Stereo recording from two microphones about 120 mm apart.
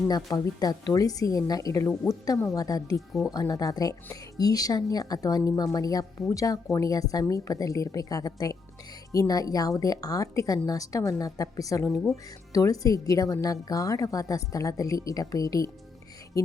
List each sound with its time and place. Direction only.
0.1 s speech: 30° left (ahead or behind)
3.1 s speech: centre (ahead or behind)
3.3 s a woman's voice: 30° left (ahead or behind)